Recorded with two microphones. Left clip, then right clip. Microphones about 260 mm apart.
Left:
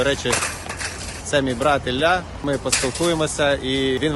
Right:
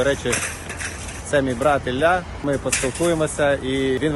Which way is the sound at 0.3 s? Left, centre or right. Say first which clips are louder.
Left 2 dB; centre.